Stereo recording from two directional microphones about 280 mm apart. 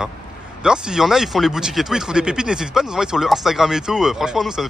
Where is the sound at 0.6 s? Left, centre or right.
Centre.